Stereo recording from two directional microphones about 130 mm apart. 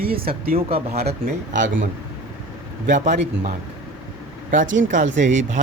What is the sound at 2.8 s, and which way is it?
Speech, 70° right (ahead or behind).